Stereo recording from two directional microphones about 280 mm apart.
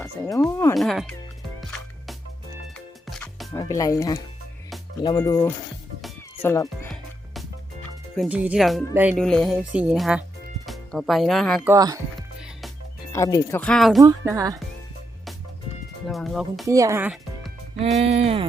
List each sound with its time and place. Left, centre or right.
0.0 s speech: centre
2.7 s music: centre
3.5 s speech: centre
11.7 s speech: centre
13.1 s speech: centre
14.0 s speech: centre
16.0 s speech: centre
16.6 s speech: centre
17.9 s speech: right